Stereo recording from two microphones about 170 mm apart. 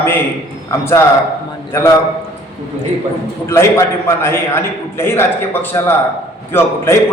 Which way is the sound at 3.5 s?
15° left (ahead or behind).